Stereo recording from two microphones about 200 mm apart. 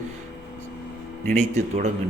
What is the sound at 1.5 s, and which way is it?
Speech, 35° right (ahead or behind).